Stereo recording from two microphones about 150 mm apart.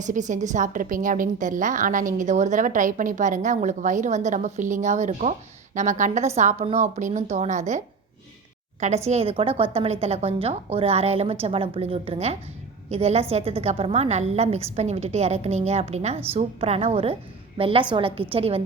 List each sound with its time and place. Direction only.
0.0 s a woman's voice: 55° right (ahead or behind)
9.0 s a woman's voice: 40° right (ahead or behind)